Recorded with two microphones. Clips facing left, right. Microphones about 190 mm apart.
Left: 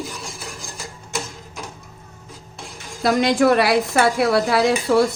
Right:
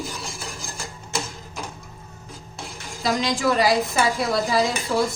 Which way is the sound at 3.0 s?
60° left (ahead or behind).